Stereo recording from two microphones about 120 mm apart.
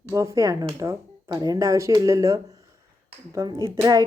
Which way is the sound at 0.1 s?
25° right (ahead or behind).